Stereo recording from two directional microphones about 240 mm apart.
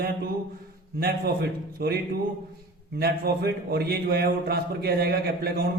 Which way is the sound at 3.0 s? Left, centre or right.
Right.